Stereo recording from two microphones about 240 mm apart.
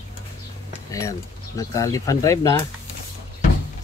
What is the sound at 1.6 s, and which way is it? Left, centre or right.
Speech, centre.